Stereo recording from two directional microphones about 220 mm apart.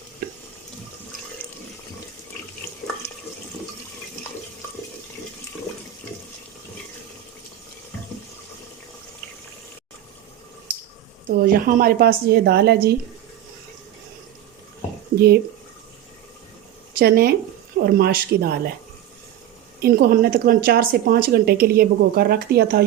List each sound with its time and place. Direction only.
0.2 s water: 40° right (ahead or behind)
11.3 s speech: 40° right (ahead or behind)
15.1 s a sound: 45° right (ahead or behind)
17.0 s speech: 45° right (ahead or behind)
19.8 s speech: 45° right (ahead or behind)